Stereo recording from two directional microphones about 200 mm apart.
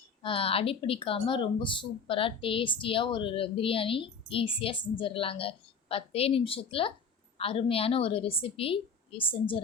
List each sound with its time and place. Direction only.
0.2 s speech: 25° left (ahead or behind)